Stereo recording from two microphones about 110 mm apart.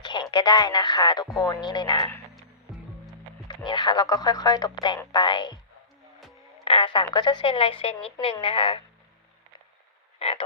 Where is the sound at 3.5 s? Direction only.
45° left (ahead or behind).